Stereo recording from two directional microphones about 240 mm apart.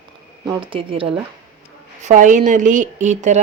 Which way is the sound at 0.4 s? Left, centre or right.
Right.